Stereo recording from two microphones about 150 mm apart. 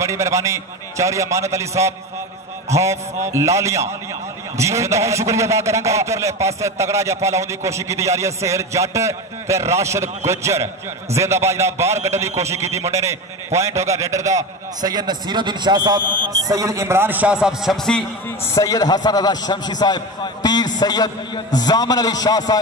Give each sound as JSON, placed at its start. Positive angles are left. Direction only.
{"t": 0.0, "sound": "a man's voice", "side_deg": -20}
{"t": 18.5, "sound": "a man's voice", "side_deg": 25}